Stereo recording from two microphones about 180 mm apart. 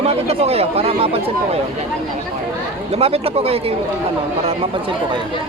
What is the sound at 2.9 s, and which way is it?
Speech, 35° right (ahead or behind).